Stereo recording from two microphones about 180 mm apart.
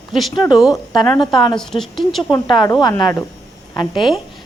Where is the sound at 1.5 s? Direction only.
5° left (ahead or behind).